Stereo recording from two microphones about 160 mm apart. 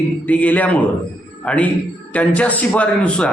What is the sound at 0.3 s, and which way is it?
A man's voice, 10° left (ahead or behind).